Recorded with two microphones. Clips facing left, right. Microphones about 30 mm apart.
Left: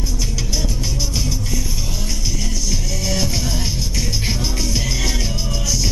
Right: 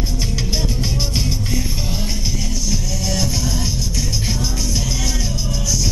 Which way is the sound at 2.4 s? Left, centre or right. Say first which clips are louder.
Right 1 dB; centre.